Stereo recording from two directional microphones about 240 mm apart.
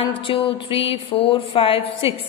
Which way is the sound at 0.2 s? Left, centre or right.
Left.